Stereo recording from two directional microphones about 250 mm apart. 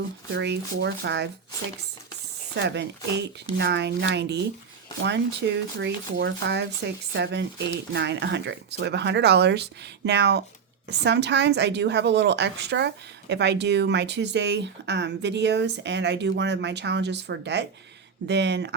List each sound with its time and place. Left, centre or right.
0.3 s a woman's voice: right
2.6 s a woman's voice: right